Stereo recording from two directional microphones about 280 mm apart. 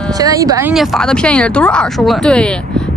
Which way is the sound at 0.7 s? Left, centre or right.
Centre.